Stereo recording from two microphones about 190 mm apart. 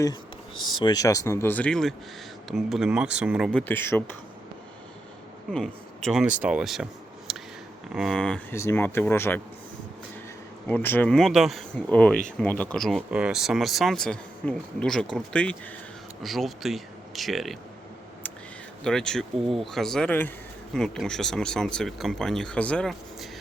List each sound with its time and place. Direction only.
0.5 s a sound: 90° left
0.8 s speech: 20° left (ahead or behind); by 3.6 s 5° right (ahead or behind)
3.6 s speech: 10° left (ahead or behind)
5.5 s speech: 5° left (ahead or behind)
7.3 s a sound: centre (ahead or behind)
7.9 s speech: centre (ahead or behind)
10.7 s speech: 10° left (ahead or behind)
18.8 s speech: 5° left (ahead or behind)